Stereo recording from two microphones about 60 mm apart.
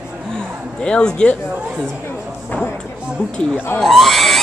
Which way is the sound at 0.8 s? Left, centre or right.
Centre.